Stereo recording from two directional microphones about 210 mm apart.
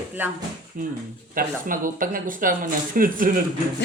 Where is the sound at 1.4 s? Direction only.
40° right (ahead or behind).